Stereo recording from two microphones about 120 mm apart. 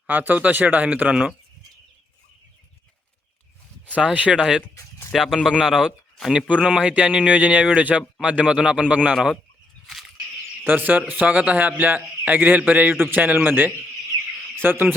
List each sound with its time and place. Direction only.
0.1 s speech: 15° right (ahead or behind)
3.9 s speech: 10° right (ahead or behind)
10.7 s speech: 15° right (ahead or behind)